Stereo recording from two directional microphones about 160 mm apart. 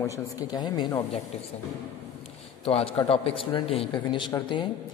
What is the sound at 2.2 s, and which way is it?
Speech, 35° left (ahead or behind).